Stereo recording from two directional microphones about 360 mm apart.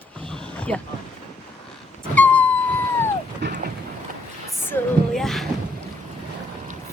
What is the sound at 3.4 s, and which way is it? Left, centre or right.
Vehicle, right.